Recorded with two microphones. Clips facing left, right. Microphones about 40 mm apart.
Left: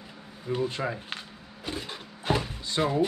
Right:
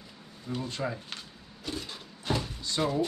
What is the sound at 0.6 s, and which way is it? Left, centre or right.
Speech, centre.